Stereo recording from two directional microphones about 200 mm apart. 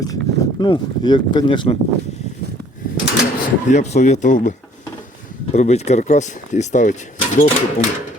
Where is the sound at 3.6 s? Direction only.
35° left (ahead or behind).